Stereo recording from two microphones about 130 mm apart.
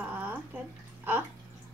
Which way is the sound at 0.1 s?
15° right (ahead or behind).